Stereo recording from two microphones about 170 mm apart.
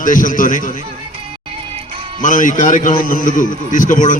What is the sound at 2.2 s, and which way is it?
A man's voice, 50° left (ahead or behind).